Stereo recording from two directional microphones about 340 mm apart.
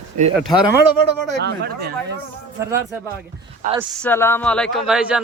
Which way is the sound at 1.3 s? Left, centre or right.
Right.